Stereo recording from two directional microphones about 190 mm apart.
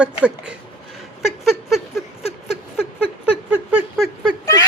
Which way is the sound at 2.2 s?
30° left (ahead or behind).